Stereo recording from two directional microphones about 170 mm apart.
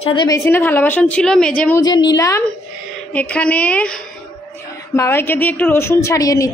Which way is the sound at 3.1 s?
10° left (ahead or behind).